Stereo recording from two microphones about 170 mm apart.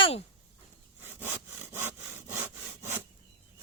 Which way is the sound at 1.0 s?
15° right (ahead or behind).